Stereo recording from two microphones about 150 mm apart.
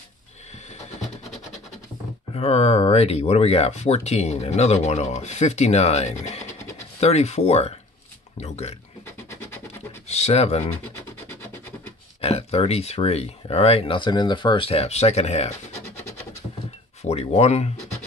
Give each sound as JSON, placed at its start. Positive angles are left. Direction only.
{"t": 2.3, "sound": "speech", "side_deg": 45}
{"t": 10.0, "sound": "speech", "side_deg": 45}
{"t": 11.2, "sound": "a sound", "side_deg": 15}
{"t": 12.2, "sound": "speech", "side_deg": 40}
{"t": 17.0, "sound": "speech", "side_deg": 45}